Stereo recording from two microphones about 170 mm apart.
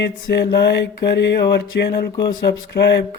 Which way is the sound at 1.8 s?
70° left (ahead or behind).